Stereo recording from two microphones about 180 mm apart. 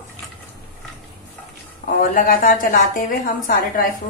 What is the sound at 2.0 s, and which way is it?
A woman's voice, 50° left (ahead or behind).